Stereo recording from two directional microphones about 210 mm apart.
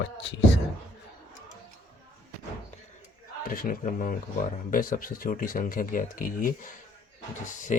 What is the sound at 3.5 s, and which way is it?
Speech, 45° left (ahead or behind).